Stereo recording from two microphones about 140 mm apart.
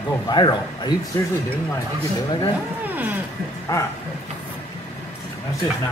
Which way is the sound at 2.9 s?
15° right (ahead or behind).